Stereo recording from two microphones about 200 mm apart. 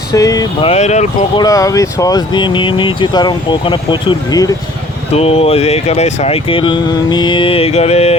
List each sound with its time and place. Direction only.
0.1 s speech: 20° left (ahead or behind)
0.7 s speech: 35° left (ahead or behind)
1.4 s speech: 15° left (ahead or behind)
5.1 s speech: 30° left (ahead or behind)